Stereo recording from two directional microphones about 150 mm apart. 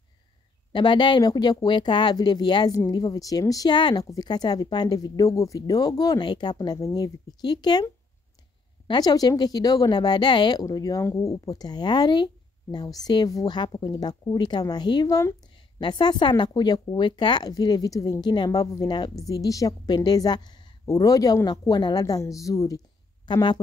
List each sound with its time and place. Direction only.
0.7 s a woman's voice: 30° left (ahead or behind)